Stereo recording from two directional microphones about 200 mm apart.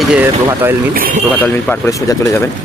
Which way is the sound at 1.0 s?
45° right (ahead or behind).